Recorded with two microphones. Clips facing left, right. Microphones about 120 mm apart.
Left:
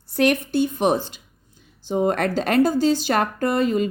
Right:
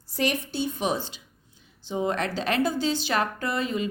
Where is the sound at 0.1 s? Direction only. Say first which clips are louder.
Left 8 dB; 60° left (ahead or behind).